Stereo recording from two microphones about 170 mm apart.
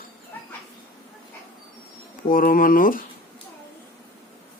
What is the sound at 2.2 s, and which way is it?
Speech, 55° left (ahead or behind).